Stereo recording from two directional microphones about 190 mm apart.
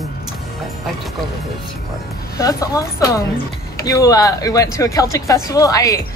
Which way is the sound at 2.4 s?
15° left (ahead or behind).